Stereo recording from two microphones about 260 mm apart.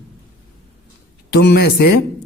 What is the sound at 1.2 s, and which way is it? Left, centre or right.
Speech, left.